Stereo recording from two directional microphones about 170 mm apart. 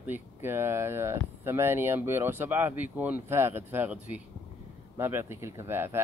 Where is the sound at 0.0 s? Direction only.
10° right (ahead or behind).